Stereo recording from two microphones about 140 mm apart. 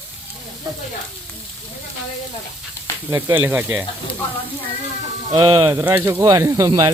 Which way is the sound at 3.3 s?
15° right (ahead or behind).